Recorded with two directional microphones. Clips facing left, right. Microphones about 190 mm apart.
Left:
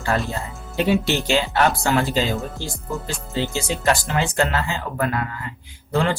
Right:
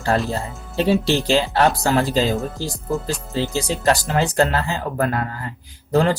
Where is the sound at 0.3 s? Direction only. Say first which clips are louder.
Right 3 dB; 35° right (ahead or behind).